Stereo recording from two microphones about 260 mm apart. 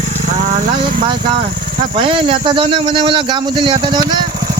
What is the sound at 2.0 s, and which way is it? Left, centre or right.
Speech, centre.